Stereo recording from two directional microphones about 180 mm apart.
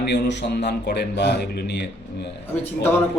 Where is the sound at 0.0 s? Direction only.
70° left (ahead or behind).